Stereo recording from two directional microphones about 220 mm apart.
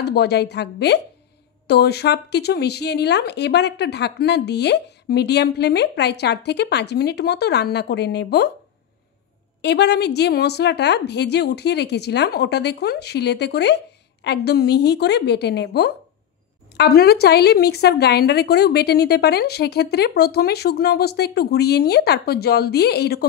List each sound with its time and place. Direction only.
0.0 s speech: 50° left (ahead or behind)
9.6 s speech: 50° left (ahead or behind)